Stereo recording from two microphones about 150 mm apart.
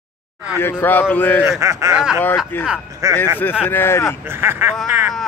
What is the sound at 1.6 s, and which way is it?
Speech, 20° right (ahead or behind).